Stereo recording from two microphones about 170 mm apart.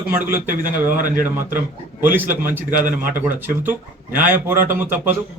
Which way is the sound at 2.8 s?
55° right (ahead or behind).